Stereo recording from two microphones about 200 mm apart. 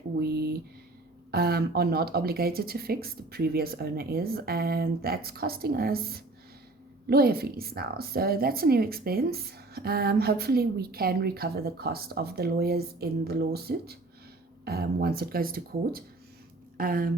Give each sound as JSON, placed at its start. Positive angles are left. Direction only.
{"t": 1.3, "sound": "a woman's voice", "side_deg": -50}